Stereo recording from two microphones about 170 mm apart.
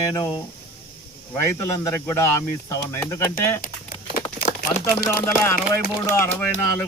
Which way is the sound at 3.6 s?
55° left (ahead or behind).